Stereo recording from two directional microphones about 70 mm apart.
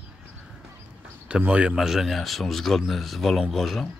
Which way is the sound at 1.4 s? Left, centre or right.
Centre.